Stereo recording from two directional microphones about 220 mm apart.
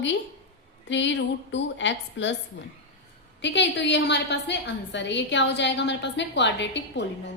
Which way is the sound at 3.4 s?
55° left (ahead or behind).